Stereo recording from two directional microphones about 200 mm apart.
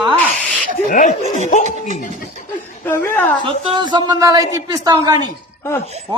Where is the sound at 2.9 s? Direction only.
10° left (ahead or behind).